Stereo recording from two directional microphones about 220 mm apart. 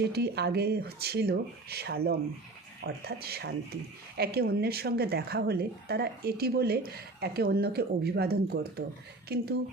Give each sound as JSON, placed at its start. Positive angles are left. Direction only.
{"t": 0.0, "sound": "a woman's voice", "side_deg": -50}